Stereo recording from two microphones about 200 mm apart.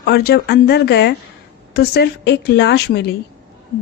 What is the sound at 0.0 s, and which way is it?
A woman's voice, 50° left (ahead or behind).